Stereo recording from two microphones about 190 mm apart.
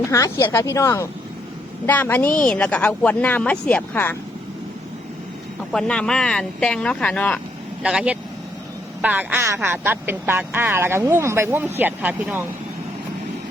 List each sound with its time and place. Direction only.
0.0 s speech: 15° left (ahead or behind)
5.7 s speech: 5° left (ahead or behind)
7.8 s speech: 5° right (ahead or behind)